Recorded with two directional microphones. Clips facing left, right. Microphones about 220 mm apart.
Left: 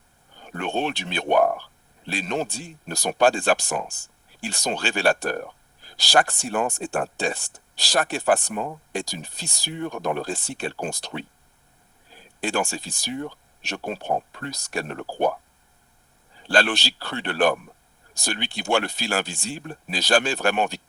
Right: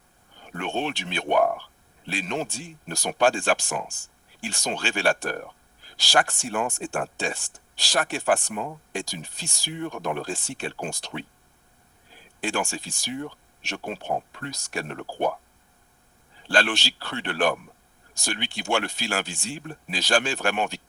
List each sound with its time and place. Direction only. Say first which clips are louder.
0.5 s speech: left 2 dB; 40° left (ahead or behind)
12.4 s speech: left 2 dB; 35° left (ahead or behind)
16.5 s speech: left 2 dB; 35° left (ahead or behind)